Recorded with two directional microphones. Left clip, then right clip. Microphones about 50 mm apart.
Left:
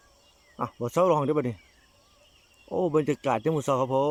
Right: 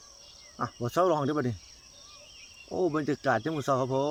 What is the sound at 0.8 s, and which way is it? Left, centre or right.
Speech, left.